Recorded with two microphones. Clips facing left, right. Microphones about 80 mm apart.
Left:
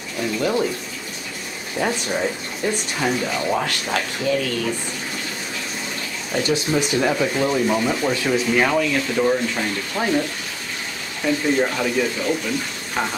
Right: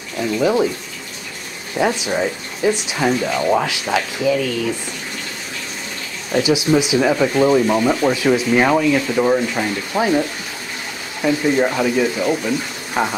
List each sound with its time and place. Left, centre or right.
0.4 s speech: centre
1.8 s speech: centre
3.6 s speech: centre
6.3 s speech: centre
11.2 s speech: centre